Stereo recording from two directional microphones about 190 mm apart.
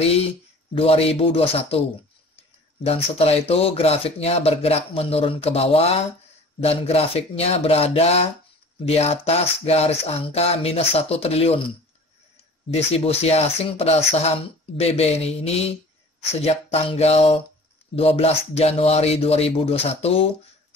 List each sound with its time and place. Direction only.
0.7 s speech: 30° left (ahead or behind)
2.8 s speech: 30° left (ahead or behind)
12.7 s speech: 30° left (ahead or behind)